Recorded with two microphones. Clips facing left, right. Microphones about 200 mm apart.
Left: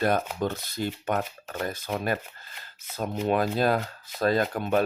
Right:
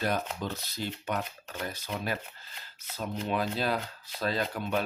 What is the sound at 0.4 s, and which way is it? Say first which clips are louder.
Speech: left 6 dB; 50° left (ahead or behind).